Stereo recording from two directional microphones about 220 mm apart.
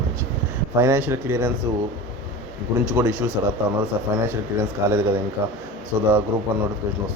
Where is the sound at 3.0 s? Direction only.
15° right (ahead or behind).